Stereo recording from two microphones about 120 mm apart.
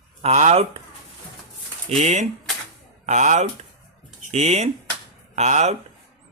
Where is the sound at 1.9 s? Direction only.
70° right (ahead or behind).